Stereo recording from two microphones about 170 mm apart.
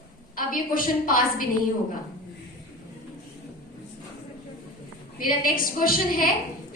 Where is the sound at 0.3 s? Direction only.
55° left (ahead or behind).